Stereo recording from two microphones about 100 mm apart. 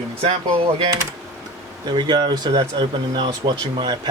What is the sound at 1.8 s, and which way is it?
Speech, 45° right (ahead or behind).